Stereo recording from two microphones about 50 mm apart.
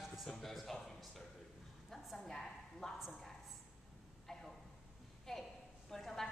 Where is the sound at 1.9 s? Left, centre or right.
Centre.